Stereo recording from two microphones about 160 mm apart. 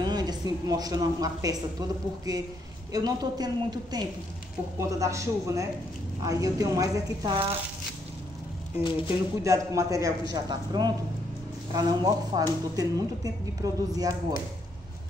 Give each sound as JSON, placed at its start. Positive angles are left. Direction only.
{"t": 0.0, "sound": "speech", "side_deg": -25}
{"t": 8.7, "sound": "speech", "side_deg": 30}
{"t": 9.4, "sound": "speech", "side_deg": -20}